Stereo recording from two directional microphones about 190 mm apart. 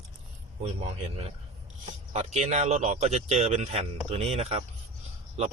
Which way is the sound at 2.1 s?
35° right (ahead or behind).